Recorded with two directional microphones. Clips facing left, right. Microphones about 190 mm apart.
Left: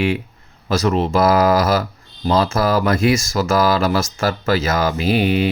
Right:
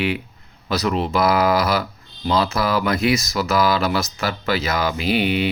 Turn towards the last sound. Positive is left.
turn(degrees=45)  # may be behind; listen again after turning